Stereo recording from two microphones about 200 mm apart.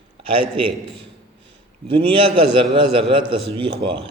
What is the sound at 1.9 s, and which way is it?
A man's voice, 25° right (ahead or behind).